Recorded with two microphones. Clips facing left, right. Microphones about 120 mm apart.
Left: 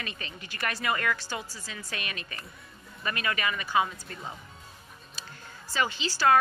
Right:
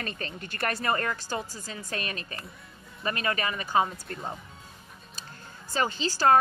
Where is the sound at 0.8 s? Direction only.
35° right (ahead or behind).